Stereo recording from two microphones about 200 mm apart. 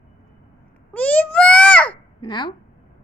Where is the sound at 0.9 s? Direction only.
5° left (ahead or behind).